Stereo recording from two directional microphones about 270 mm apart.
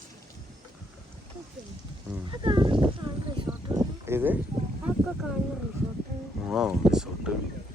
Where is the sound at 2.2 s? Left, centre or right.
Centre.